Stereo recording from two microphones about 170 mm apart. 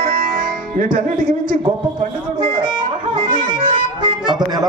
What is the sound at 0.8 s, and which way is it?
Speech, 50° right (ahead or behind).